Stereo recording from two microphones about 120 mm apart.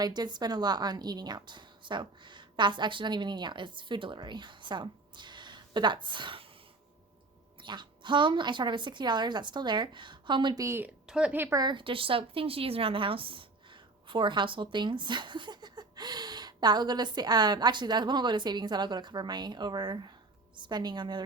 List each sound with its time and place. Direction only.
0.0 s a woman's voice: 35° right (ahead or behind)
7.6 s a woman's voice: 40° right (ahead or behind)
10.6 s a woman's voice: 20° right (ahead or behind)
11.0 s a woman's voice: 5° right (ahead or behind)
11.4 s a woman's voice: 35° right (ahead or behind)